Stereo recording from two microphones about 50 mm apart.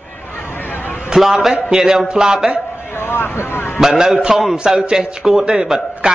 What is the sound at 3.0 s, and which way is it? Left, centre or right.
Speech, left.